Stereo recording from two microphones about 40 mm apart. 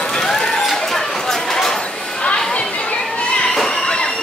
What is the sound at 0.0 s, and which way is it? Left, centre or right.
Run, centre.